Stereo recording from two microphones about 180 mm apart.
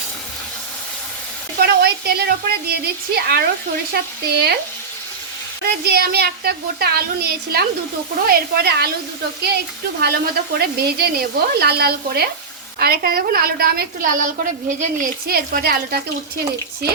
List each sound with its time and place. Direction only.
1.5 s a woman's voice: 60° right (ahead or behind)
5.6 s a woman's voice: 60° right (ahead or behind)
10.0 s a woman's voice: 60° right (ahead or behind)